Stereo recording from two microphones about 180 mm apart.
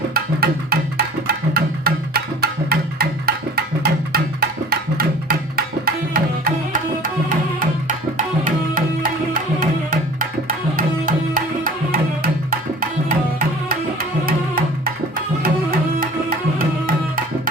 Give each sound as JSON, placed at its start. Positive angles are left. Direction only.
{"t": 0.1, "sound": "music", "side_deg": -60}
{"t": 8.4, "sound": "music", "side_deg": -50}
{"t": 13.7, "sound": "music", "side_deg": -50}
{"t": 16.6, "sound": "music", "side_deg": -50}